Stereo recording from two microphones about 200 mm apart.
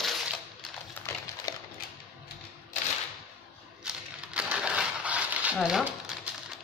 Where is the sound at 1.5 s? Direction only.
20° left (ahead or behind).